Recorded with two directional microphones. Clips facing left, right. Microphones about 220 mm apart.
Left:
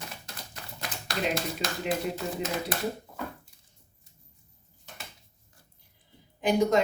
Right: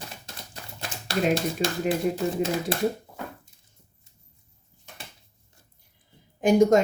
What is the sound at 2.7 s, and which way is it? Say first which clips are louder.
Speech: right 6 dB; 30° right (ahead or behind).